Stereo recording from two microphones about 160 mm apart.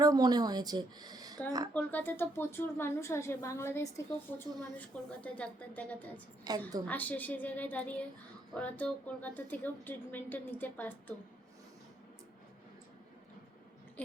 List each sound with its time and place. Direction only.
0.0 s speech: 25° right (ahead or behind)
1.7 s a woman's voice: 10° left (ahead or behind)
6.5 s speech: 25° right (ahead or behind)
6.8 s a woman's voice: 10° left (ahead or behind)